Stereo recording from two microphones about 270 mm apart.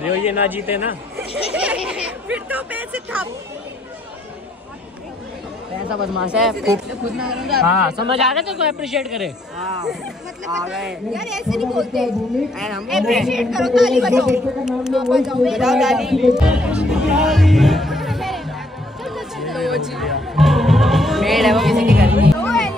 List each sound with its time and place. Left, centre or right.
0.0 s a man's voice: centre
5.9 s a man's voice: centre
7.9 s speech: centre
8.2 s a man's voice: centre
10.7 s a man's voice: centre
19.0 s chatter: centre
20.3 s music: centre